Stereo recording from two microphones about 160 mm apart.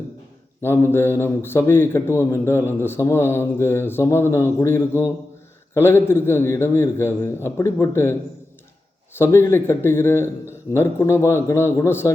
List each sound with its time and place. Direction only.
0.6 s a man's voice: 15° left (ahead or behind)
9.1 s a man's voice: 15° left (ahead or behind)